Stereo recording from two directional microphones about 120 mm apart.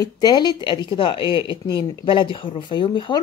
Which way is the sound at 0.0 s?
35° left (ahead or behind).